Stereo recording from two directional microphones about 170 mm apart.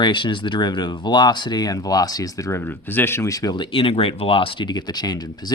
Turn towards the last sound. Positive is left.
turn(degrees=25)  # may be behind; listen again after turning